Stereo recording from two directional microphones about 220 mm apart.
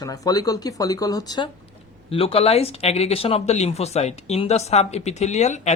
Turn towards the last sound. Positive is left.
turn(degrees=30)  # may be behind; listen again after turning